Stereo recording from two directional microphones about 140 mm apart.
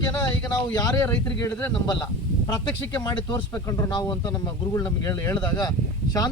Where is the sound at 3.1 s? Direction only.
30° left (ahead or behind).